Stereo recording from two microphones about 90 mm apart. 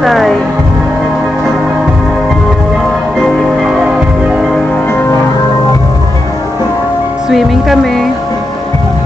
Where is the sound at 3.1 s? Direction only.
Centre (ahead or behind).